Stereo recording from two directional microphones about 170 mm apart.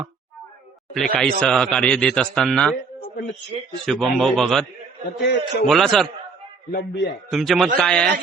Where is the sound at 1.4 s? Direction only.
Centre (ahead or behind).